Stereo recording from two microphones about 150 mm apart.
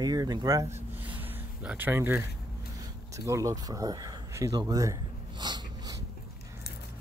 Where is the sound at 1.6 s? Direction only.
10° right (ahead or behind); by 5.9 s 30° right (ahead or behind).